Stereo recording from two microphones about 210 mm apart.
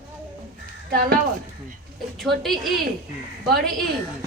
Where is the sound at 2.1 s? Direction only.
Centre (ahead or behind).